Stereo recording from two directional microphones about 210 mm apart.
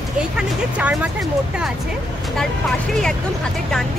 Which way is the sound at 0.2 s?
5° right (ahead or behind).